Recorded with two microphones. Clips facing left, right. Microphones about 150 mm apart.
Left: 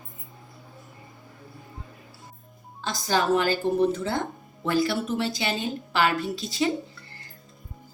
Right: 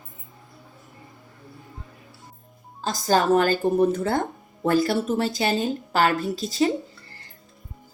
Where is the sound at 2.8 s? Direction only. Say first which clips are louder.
Right 4 dB; 45° right (ahead or behind).